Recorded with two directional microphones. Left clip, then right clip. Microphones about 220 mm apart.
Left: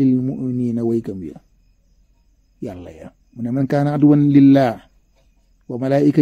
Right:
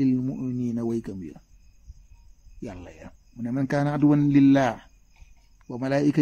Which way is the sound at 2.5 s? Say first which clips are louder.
Left 8 dB; 25° left (ahead or behind).